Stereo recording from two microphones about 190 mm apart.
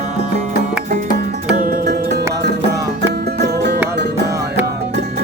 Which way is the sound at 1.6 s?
50° right (ahead or behind).